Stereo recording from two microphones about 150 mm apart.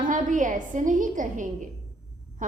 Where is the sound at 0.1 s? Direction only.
60° right (ahead or behind).